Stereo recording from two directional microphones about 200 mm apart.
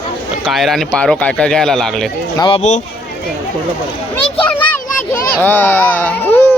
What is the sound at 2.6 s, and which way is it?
Speech, 35° left (ahead or behind).